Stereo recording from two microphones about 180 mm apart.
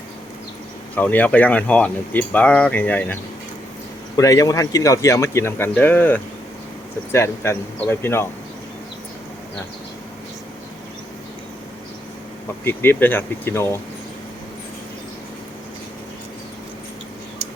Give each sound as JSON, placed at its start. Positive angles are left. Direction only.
{"t": 0.9, "sound": "speech", "side_deg": 10}
{"t": 4.2, "sound": "speech", "side_deg": 20}
{"t": 12.6, "sound": "speech", "side_deg": 10}